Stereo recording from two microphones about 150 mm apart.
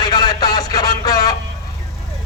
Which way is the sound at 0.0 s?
30° left (ahead or behind).